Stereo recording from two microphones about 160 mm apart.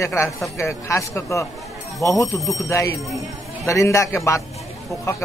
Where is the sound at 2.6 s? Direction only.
20° left (ahead or behind).